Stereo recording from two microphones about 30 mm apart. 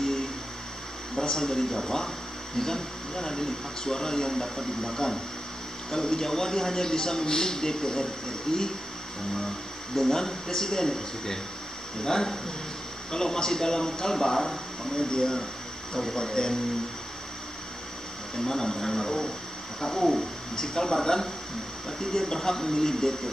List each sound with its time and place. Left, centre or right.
0.0 s music: centre
1.2 s a man's voice: centre
9.9 s speech: centre
15.0 s a man's voice: left
15.9 s speech: centre
16.2 s a man's voice: left
18.4 s speech: centre
19.9 s speech: centre
20.5 s a man's voice: centre